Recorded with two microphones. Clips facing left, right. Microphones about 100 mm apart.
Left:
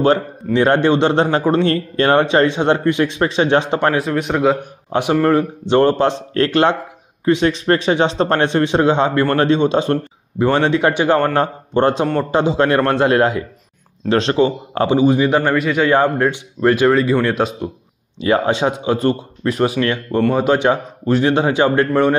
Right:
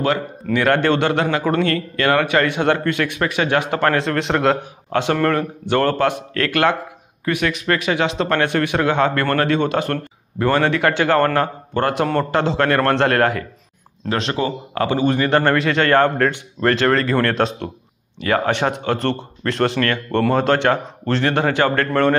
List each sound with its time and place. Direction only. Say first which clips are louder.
0.0 s speech: left 5 dB; 30° left (ahead or behind)
4.3 s a man's voice: left 2 dB; 5° left (ahead or behind)
4.9 s a man's voice: left 3 dB; 15° left (ahead or behind)
14.0 s speech: left 6 dB; 30° left (ahead or behind)
15.0 s a man's voice: left 3 dB; 15° left (ahead or behind)
18.2 s a man's voice: left 3 dB; 20° left (ahead or behind)